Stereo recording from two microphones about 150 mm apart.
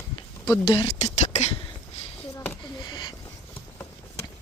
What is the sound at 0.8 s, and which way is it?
Speech, 45° left (ahead or behind).